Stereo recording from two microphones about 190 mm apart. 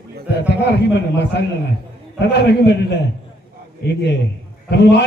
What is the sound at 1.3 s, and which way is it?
A man's voice, 65° left (ahead or behind).